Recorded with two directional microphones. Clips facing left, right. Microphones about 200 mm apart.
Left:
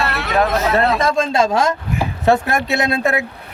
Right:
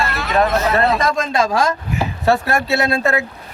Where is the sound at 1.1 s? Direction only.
25° left (ahead or behind).